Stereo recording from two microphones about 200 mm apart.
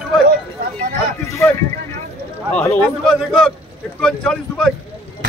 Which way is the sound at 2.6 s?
5° left (ahead or behind).